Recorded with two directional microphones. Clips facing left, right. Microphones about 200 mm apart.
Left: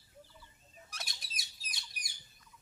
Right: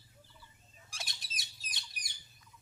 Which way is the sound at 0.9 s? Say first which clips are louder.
Right 1 dB; 5° right (ahead or behind).